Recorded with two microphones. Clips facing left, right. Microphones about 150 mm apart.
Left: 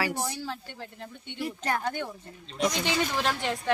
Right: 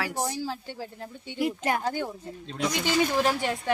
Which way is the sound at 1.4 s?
15° right (ahead or behind).